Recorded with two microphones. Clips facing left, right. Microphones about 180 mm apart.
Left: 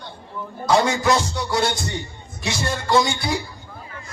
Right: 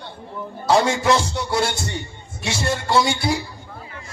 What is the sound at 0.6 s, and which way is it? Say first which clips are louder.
Music: right 1 dB; 30° right (ahead or behind).